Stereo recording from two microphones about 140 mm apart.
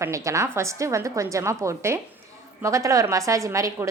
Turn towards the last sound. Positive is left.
turn(degrees=-20)  # may be behind; listen again after turning